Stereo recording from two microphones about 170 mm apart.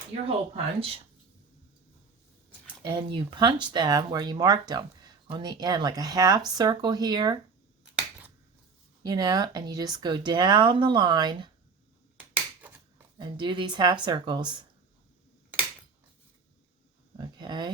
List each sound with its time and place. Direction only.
0.3 s speech: 35° right (ahead or behind)
2.8 s speech: 30° right (ahead or behind)
9.0 s speech: 25° right (ahead or behind)
13.1 s speech: 25° right (ahead or behind)
17.2 s a sound: 25° right (ahead or behind)